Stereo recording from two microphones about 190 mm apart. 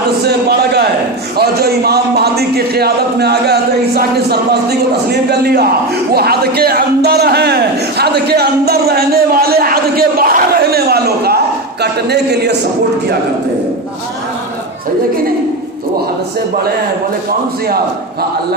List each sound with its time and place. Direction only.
0.3 s a sound: 60° right (ahead or behind)
1.4 s a man's voice: 55° right (ahead or behind)
17.7 s a man's voice: 55° right (ahead or behind)